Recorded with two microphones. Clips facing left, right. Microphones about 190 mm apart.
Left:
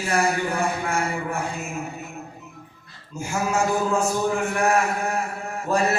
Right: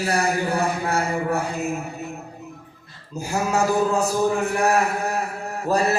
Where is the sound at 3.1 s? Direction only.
35° right (ahead or behind).